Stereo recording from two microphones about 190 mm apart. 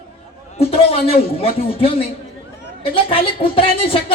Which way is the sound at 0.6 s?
30° left (ahead or behind).